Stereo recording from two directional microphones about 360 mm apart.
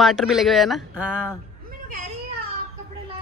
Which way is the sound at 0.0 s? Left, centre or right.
Centre.